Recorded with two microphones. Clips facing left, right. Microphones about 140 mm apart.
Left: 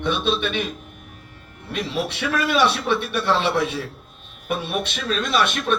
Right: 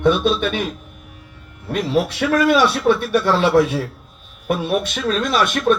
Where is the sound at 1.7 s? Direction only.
50° right (ahead or behind).